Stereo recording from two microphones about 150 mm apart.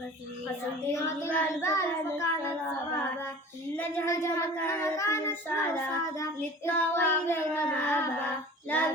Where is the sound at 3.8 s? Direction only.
15° left (ahead or behind).